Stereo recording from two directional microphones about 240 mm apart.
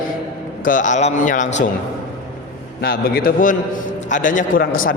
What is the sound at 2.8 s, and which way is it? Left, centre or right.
A man's voice, left.